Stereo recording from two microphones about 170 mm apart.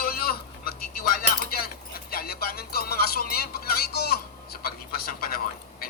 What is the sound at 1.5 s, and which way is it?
Speech, 65° left (ahead or behind).